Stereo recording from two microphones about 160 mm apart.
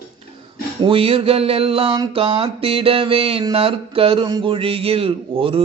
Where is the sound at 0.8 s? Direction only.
35° right (ahead or behind).